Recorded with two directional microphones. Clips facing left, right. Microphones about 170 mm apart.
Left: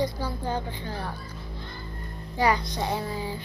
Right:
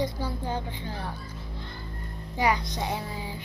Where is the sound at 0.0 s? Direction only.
20° right (ahead or behind).